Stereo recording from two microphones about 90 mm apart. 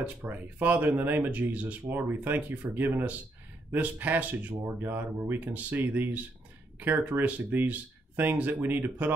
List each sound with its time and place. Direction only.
0.0 s speech: 20° right (ahead or behind)